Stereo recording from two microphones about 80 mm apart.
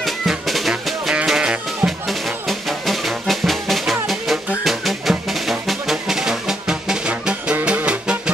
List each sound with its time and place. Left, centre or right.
0.0 s music: centre